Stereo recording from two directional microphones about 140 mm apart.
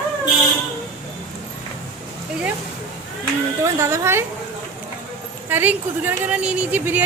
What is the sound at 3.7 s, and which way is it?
Speech, 20° right (ahead or behind).